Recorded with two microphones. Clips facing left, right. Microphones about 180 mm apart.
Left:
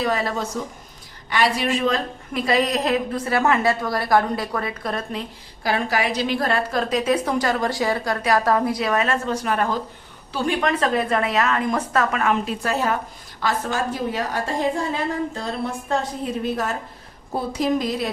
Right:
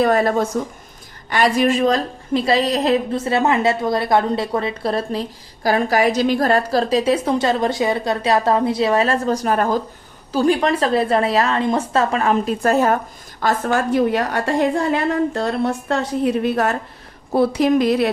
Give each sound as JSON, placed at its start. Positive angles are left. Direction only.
{"t": 0.0, "sound": "a woman's voice", "side_deg": -50}